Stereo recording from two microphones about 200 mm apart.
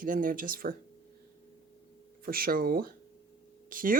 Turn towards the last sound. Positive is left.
turn(degrees=-45)  # may be behind; listen again after turning